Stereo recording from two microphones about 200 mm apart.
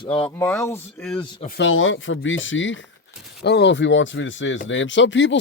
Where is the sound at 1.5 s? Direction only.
65° left (ahead or behind).